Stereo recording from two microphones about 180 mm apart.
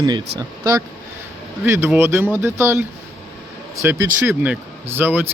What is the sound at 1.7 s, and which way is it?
Speech, 15° right (ahead or behind).